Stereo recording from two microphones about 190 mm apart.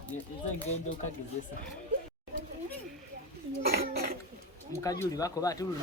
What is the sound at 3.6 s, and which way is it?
Cough, 55° right (ahead or behind).